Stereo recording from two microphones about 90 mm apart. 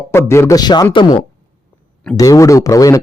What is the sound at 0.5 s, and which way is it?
Speech, 50° left (ahead or behind).